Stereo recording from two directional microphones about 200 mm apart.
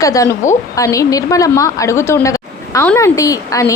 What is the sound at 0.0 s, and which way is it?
A woman's voice, 15° left (ahead or behind).